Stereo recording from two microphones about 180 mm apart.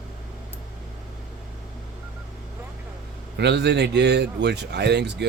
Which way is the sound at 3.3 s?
70° right (ahead or behind).